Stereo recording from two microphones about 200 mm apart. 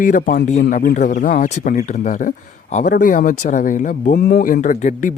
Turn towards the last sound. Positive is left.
turn(degrees=40)  # may be behind; listen again after turning